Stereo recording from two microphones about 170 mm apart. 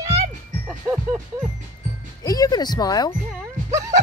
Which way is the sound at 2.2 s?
20° left (ahead or behind).